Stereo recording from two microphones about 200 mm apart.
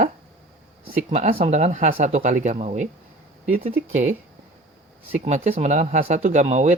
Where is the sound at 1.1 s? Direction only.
35° right (ahead or behind).